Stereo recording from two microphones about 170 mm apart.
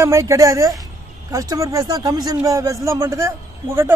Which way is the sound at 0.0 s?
15° right (ahead or behind).